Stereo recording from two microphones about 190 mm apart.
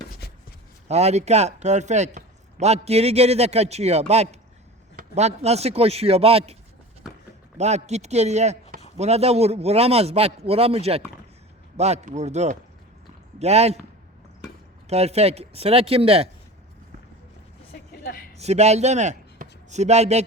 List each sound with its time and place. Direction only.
0.2 s a sound: 55° left (ahead or behind)
0.9 s speech: 35° right (ahead or behind)
7.6 s speech: 35° right (ahead or behind)
14.8 s speech: 35° right (ahead or behind)
18.3 s a man's voice: 35° right (ahead or behind)